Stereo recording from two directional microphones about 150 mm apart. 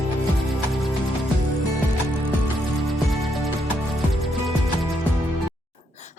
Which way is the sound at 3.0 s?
Centre (ahead or behind).